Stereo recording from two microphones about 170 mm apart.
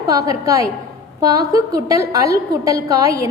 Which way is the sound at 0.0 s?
20° right (ahead or behind).